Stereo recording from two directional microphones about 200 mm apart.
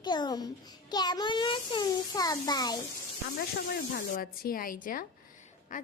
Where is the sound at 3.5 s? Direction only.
50° left (ahead or behind).